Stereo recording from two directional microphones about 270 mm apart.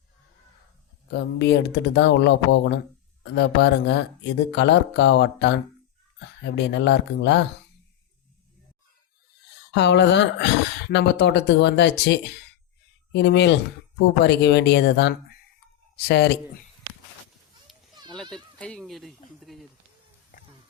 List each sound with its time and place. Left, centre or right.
1.1 s speech: left
9.5 s speech: left
17.7 s children playing: centre
18.6 s speech: centre
19.4 s a sound: centre
20.3 s a sound: left